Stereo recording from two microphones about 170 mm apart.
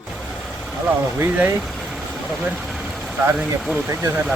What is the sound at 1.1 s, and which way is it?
Speech, 10° right (ahead or behind).